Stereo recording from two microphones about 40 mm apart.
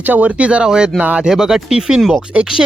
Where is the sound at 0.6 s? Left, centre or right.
Right.